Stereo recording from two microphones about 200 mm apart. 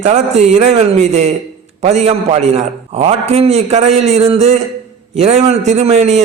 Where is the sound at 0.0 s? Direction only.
35° right (ahead or behind).